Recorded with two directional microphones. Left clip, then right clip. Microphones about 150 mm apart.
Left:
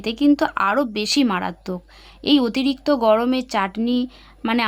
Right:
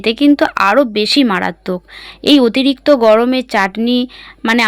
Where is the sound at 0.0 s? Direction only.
25° right (ahead or behind).